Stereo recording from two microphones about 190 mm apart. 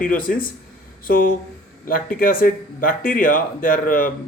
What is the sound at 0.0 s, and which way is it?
Speech, 45° left (ahead or behind).